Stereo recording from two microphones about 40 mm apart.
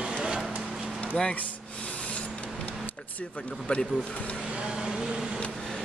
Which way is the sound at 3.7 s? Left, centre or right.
Left.